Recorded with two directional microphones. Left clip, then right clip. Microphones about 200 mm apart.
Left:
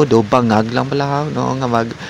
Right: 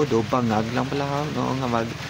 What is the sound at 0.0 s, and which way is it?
Speech, 40° left (ahead or behind).